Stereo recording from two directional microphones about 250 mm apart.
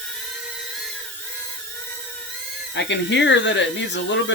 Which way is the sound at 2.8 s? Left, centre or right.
Left.